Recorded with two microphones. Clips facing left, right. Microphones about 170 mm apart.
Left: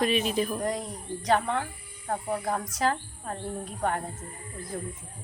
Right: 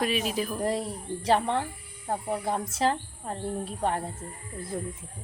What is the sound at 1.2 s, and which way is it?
Speech, 30° right (ahead or behind).